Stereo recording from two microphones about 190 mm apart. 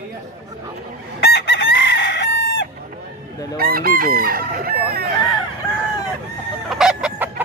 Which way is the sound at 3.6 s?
50° right (ahead or behind).